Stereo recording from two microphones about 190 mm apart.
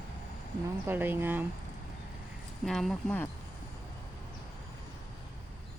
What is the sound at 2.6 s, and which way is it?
Speech, centre (ahead or behind).